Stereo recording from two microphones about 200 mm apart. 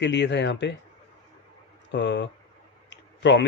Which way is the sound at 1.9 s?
60° left (ahead or behind).